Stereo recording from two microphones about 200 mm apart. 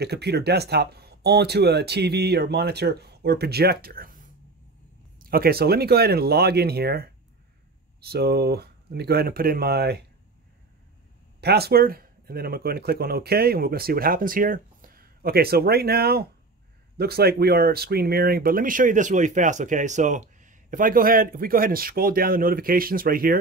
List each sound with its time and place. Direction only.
0.0 s speech: 55° right (ahead or behind)
5.2 s speech: 50° right (ahead or behind)
11.4 s speech: 50° right (ahead or behind)